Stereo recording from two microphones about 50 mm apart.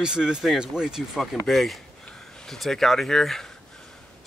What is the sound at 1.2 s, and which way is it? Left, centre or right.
Speech, centre.